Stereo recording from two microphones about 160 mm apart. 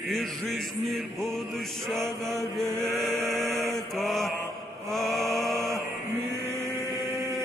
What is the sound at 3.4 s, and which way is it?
Chant, centre (ahead or behind).